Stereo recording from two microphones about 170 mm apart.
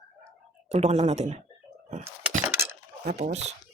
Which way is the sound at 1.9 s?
40° right (ahead or behind).